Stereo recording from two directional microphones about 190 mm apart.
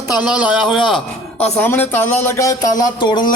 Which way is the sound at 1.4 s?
10° left (ahead or behind).